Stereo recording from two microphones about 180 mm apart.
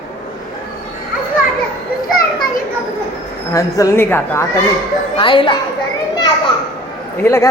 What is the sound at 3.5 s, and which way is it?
Speech, 15° left (ahead or behind).